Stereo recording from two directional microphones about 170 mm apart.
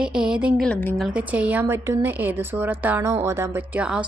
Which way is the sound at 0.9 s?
5° right (ahead or behind).